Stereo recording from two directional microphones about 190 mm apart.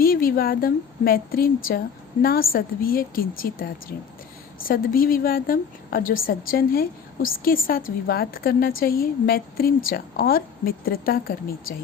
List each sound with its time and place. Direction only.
0.0 s a woman's voice: 50° left (ahead or behind)